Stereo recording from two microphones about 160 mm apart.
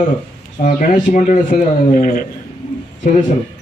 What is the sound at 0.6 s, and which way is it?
A man's voice, 50° left (ahead or behind).